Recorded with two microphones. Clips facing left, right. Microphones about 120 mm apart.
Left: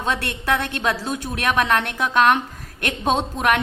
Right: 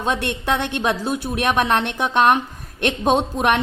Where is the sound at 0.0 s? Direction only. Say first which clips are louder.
Right 2 dB; 20° right (ahead or behind).